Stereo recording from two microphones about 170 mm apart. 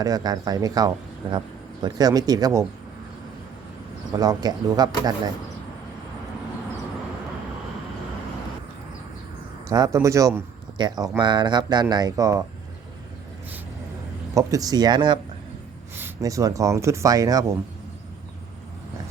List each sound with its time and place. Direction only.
0.0 s a man's voice: 20° right (ahead or behind)
4.2 s a man's voice: 20° right (ahead or behind)
9.6 s a man's voice: 20° right (ahead or behind)
14.3 s a man's voice: 20° right (ahead or behind)